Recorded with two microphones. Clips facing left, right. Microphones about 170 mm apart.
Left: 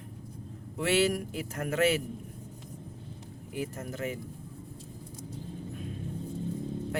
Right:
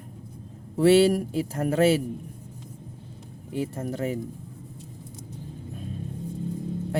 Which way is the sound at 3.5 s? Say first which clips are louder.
Right 6 dB; 30° right (ahead or behind).